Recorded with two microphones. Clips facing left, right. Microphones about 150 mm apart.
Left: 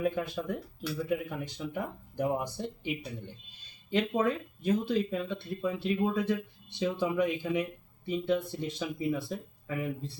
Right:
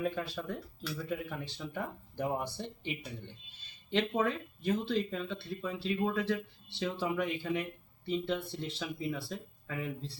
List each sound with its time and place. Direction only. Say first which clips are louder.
0.0 s speech: left 4 dB; 15° left (ahead or behind)